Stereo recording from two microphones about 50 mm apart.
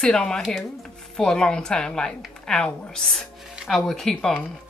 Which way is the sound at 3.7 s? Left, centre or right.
Centre.